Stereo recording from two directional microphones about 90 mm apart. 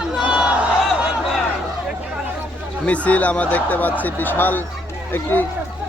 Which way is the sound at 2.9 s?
15° left (ahead or behind).